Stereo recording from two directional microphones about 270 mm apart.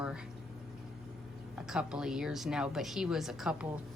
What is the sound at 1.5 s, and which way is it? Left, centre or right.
A woman's voice, centre.